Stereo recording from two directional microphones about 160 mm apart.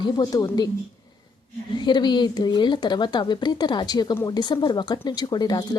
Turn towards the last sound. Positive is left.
turn(degrees=25)  # may be behind; listen again after turning